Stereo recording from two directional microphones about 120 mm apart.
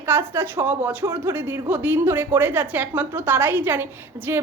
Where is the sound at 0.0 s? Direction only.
20° right (ahead or behind).